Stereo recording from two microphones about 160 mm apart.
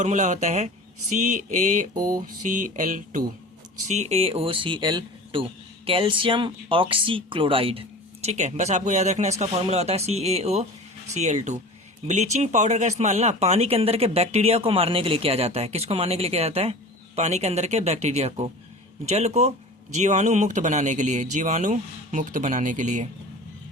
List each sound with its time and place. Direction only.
0.0 s speech: 50° right (ahead or behind)
3.8 s speech: 45° right (ahead or behind)